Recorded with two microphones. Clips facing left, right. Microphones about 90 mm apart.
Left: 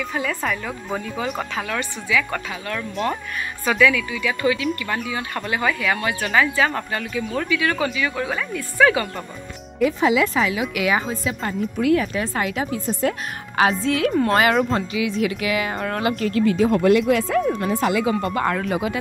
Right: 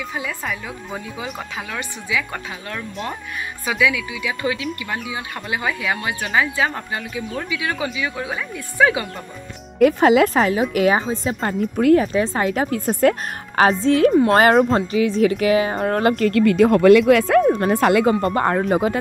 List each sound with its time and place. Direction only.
0.1 s speech: 10° right (ahead or behind)
9.8 s speech: 55° right (ahead or behind); by 12.6 s 35° right (ahead or behind)
12.7 s speech: 55° right (ahead or behind)
13.6 s speech: 40° right (ahead or behind)
16.3 s speech: 60° right (ahead or behind)
17.1 s speech: 60° right (ahead or behind)
17.4 s speech: 45° right (ahead or behind)